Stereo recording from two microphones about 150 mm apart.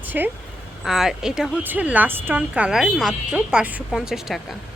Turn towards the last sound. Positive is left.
turn(degrees=0)  # may be behind; listen again after turning